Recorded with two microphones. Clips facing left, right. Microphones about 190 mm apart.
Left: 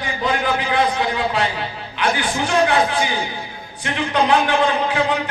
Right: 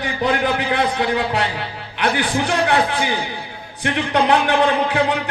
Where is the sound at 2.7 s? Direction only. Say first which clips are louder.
Even; 60° right (ahead or behind).